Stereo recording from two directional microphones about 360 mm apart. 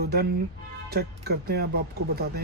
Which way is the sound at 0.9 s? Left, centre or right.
Right.